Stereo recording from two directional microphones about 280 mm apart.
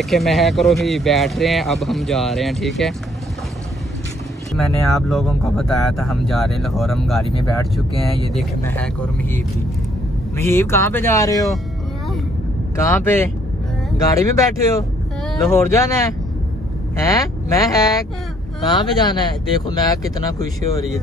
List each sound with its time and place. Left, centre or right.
0.0 s speech: centre
4.6 s speech: centre
12.9 s speech: centre
17.0 s speech: centre